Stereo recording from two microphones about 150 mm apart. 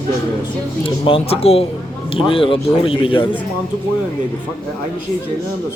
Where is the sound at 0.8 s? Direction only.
35° left (ahead or behind).